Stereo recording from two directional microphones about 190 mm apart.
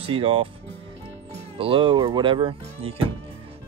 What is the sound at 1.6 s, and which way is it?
Speech, 30° right (ahead or behind).